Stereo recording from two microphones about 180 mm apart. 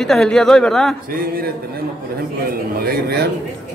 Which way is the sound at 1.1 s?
55° right (ahead or behind).